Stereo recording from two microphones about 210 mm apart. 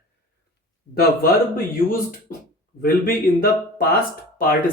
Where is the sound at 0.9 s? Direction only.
45° left (ahead or behind).